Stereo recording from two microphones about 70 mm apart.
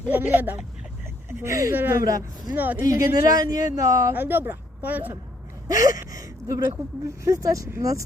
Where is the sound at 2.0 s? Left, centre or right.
Right.